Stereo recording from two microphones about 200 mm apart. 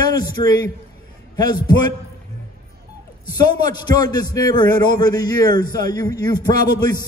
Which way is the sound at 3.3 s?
20° left (ahead or behind).